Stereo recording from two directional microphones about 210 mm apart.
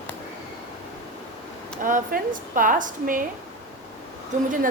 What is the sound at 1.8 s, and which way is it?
A woman's voice, 40° right (ahead or behind).